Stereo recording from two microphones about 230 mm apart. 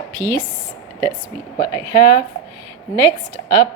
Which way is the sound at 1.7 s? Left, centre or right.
Right.